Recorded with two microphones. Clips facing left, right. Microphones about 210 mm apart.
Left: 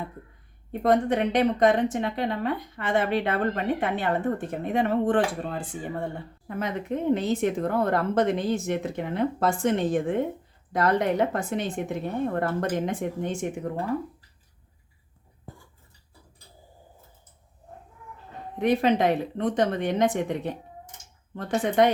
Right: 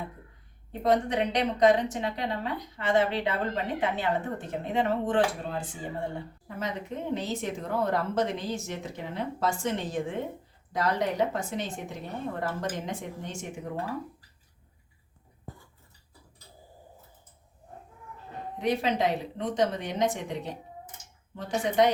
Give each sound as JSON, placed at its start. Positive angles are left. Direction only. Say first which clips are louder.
{"t": 0.7, "sound": "a woman's voice", "louder": "left 3 dB", "side_deg": 55}
{"t": 18.6, "sound": "a woman's voice", "louder": "left 5 dB", "side_deg": 55}